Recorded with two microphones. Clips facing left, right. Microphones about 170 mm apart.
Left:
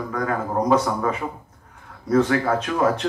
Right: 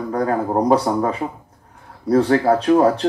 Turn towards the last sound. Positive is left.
turn(degrees=-35)  # may be behind; listen again after turning